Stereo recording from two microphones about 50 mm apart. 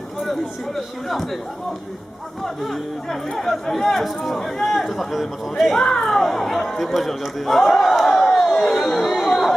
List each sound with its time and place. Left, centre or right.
0.2 s speech: centre
2.4 s speech: centre
6.9 s a sound: centre